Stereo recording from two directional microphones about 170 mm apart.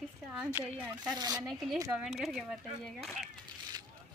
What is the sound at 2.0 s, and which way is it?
Speech, centre (ahead or behind).